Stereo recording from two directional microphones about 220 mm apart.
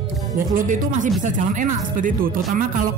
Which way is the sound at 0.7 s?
35° right (ahead or behind).